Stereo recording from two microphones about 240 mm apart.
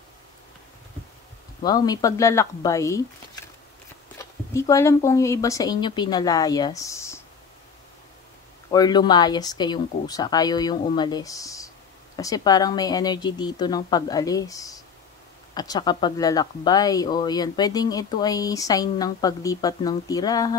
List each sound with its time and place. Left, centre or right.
1.6 s speech: centre
4.2 s speech: centre
8.6 s speech: centre